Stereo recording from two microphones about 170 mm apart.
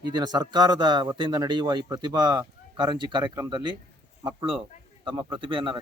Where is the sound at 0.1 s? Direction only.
25° right (ahead or behind).